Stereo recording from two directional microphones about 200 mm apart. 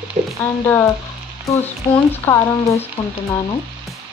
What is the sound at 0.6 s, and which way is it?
Speech, 10° left (ahead or behind).